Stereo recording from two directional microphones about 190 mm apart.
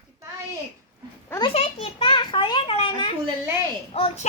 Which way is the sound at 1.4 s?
35° left (ahead or behind).